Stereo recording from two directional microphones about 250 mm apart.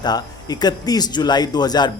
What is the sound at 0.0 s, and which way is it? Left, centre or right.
A man's voice, centre.